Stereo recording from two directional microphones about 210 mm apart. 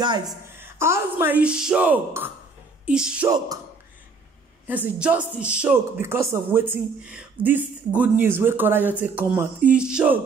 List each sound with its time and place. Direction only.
0.0 s speech: 20° right (ahead or behind); by 3.3 s 5° right (ahead or behind)
3.3 s speech: 15° right (ahead or behind)
4.6 s speech: 10° right (ahead or behind)